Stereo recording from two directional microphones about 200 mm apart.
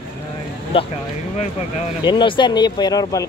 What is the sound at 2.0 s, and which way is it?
Speech, 25° left (ahead or behind).